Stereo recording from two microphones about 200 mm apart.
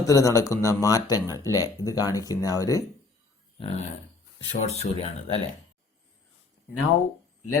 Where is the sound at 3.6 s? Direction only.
30° left (ahead or behind).